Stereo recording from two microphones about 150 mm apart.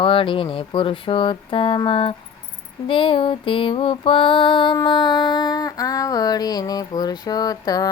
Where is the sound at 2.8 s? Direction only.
35° left (ahead or behind).